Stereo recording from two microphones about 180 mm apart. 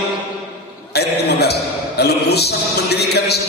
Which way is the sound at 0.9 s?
65° left (ahead or behind).